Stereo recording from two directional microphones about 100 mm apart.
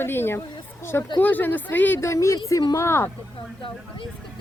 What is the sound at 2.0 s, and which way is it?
Speech, 30° left (ahead or behind).